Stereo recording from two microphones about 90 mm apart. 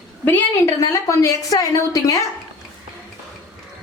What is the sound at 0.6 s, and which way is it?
A woman's voice, 35° left (ahead or behind).